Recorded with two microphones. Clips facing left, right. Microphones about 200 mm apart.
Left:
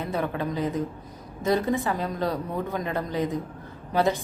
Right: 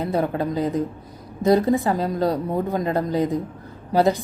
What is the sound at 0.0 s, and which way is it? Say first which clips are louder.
A woman's voice: right 5 dB; 35° right (ahead or behind).